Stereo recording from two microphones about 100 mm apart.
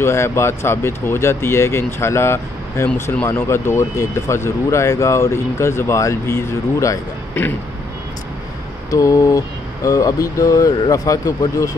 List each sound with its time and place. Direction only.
0.0 s speech: 25° left (ahead or behind)
8.9 s speech: 35° left (ahead or behind)